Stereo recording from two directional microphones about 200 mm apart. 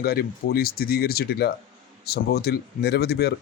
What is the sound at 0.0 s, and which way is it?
Speech, 50° left (ahead or behind).